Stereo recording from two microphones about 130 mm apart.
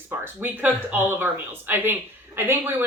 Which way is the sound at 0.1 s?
15° right (ahead or behind).